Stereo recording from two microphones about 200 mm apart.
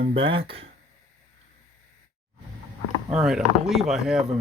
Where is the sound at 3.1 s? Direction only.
5° right (ahead or behind).